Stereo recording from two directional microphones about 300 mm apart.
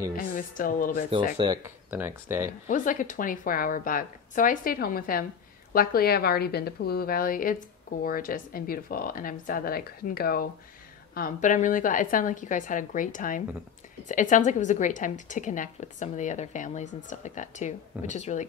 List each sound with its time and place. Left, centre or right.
0.2 s a woman's voice: left
1.4 s speech: centre
2.7 s a woman's voice: left